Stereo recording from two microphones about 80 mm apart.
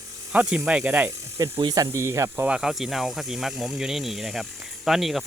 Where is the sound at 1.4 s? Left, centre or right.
Right.